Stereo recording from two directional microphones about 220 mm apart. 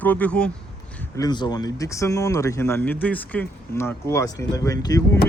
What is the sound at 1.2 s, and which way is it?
Speech, 20° left (ahead or behind).